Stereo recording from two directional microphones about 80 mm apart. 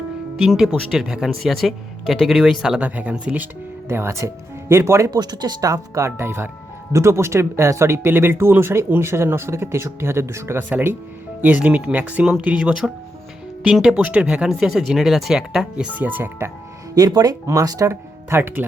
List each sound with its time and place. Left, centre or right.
0.3 s speech: centre
3.8 s speech: right
5.2 s speech: right
16.9 s speech: right
18.3 s speech: right